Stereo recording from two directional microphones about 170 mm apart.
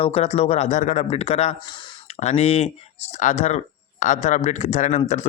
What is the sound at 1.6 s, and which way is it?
Speech, 25° left (ahead or behind).